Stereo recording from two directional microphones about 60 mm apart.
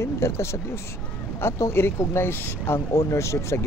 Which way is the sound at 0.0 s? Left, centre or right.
Left.